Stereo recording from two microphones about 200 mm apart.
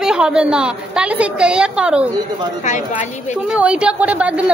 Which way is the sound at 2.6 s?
35° left (ahead or behind).